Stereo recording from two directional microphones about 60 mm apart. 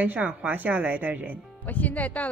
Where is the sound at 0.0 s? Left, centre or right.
Right.